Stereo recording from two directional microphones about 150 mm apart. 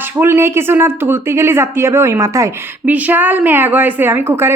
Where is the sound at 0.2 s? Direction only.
15° right (ahead or behind).